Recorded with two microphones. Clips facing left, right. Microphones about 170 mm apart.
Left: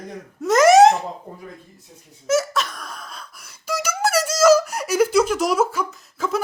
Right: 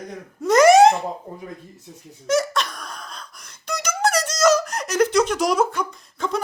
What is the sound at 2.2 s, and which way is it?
Laughter, 5° left (ahead or behind).